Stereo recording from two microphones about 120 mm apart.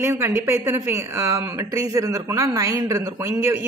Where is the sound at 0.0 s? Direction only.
20° right (ahead or behind).